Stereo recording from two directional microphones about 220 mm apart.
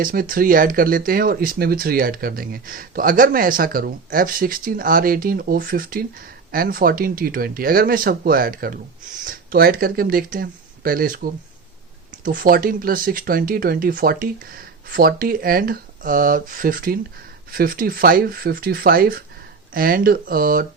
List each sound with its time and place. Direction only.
0.0 s speech: 40° right (ahead or behind)